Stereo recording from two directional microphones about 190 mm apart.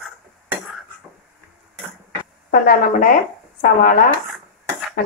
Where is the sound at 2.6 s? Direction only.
50° left (ahead or behind).